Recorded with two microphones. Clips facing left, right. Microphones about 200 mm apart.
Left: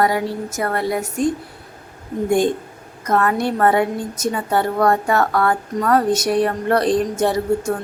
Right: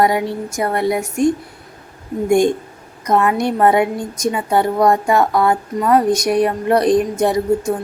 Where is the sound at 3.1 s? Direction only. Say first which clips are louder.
Right 2 dB; 15° right (ahead or behind).